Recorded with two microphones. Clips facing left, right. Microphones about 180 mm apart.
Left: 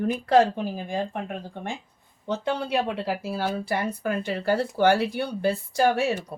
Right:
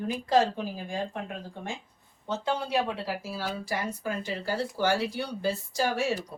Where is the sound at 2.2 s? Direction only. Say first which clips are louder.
Left 3 dB; 60° left (ahead or behind).